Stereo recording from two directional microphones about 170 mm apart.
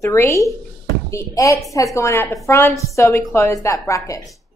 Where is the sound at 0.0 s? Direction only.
15° left (ahead or behind).